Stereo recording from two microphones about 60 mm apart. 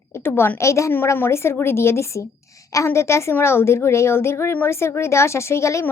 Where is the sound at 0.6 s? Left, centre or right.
Left.